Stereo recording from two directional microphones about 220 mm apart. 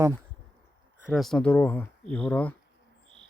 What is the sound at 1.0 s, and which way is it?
Speech, centre (ahead or behind).